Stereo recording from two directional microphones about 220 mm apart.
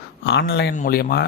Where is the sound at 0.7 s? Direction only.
40° left (ahead or behind).